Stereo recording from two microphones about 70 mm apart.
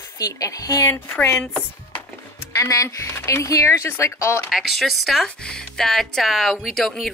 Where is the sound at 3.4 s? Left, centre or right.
Left.